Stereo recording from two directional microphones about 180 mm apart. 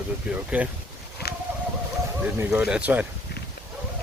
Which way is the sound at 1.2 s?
60° left (ahead or behind).